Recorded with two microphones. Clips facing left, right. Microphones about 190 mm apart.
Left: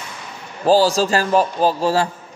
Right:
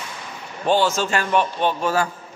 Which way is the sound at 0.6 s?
35° left (ahead or behind).